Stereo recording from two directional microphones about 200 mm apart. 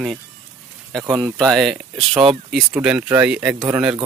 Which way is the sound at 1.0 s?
15° right (ahead or behind).